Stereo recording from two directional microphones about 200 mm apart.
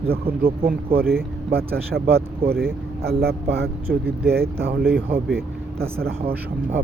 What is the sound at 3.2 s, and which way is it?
Speech, 55° right (ahead or behind).